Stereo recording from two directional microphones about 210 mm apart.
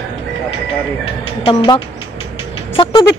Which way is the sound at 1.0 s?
25° left (ahead or behind).